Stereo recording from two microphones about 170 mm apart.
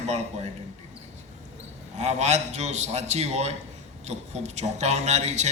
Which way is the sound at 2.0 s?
40° right (ahead or behind).